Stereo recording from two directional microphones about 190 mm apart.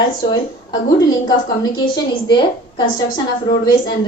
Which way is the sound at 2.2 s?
25° left (ahead or behind).